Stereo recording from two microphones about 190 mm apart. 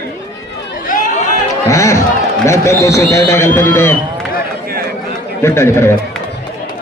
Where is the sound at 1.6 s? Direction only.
15° left (ahead or behind).